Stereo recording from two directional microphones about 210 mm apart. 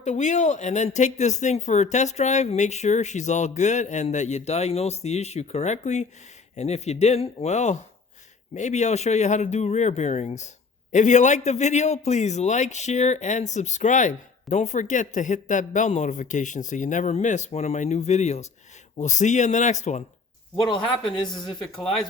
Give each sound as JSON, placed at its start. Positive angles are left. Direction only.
{"t": 0.0, "sound": "a man's voice", "side_deg": 35}